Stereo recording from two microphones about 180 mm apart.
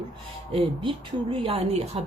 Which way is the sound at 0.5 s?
30° right (ahead or behind).